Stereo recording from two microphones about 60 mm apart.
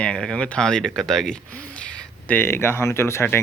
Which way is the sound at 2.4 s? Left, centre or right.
Left.